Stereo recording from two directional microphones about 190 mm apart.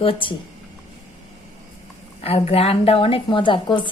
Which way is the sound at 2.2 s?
30° left (ahead or behind).